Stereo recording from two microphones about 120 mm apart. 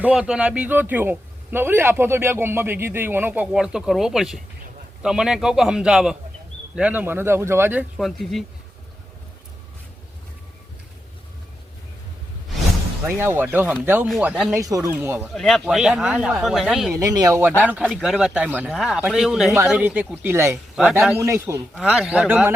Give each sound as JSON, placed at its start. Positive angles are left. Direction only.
{"t": 0.0, "sound": "a man's voice", "side_deg": -10}
{"t": 7.9, "sound": "a man's voice", "side_deg": 0}
{"t": 13.1, "sound": "a man's voice", "side_deg": -20}
{"t": 14.5, "sound": "speech", "side_deg": -25}
{"t": 14.9, "sound": "a man's voice", "side_deg": -15}
{"t": 15.3, "sound": "a man's voice", "side_deg": 5}
{"t": 16.9, "sound": "speech", "side_deg": -30}
{"t": 17.6, "sound": "a man's voice", "side_deg": -15}
{"t": 17.8, "sound": "a man's voice", "side_deg": -5}
{"t": 20.8, "sound": "a man's voice", "side_deg": -5}
{"t": 21.2, "sound": "speech", "side_deg": -20}
{"t": 21.8, "sound": "a man's voice", "side_deg": -5}